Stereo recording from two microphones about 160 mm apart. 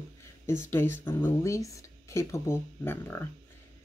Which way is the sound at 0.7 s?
15° left (ahead or behind).